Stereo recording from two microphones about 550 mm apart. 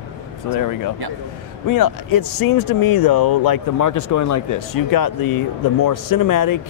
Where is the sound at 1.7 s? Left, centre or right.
Left.